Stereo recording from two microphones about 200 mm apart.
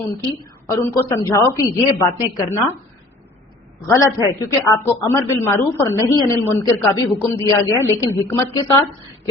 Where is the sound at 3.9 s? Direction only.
15° left (ahead or behind).